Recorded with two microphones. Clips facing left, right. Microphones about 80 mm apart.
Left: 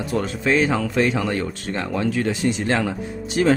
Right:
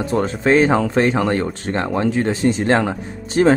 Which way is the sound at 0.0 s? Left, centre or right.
Right.